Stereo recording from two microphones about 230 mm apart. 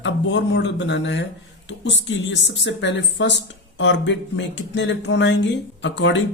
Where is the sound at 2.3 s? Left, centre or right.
Left.